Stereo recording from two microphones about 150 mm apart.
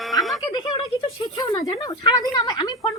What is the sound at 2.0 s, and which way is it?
Speech, 30° left (ahead or behind).